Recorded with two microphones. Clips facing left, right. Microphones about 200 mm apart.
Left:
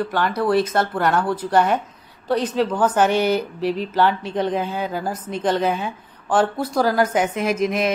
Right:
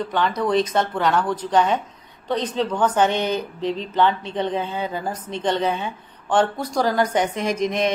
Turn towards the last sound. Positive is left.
turn(degrees=5)  # may be behind; listen again after turning